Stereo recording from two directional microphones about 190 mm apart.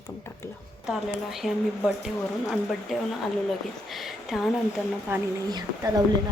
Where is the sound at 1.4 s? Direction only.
Centre (ahead or behind).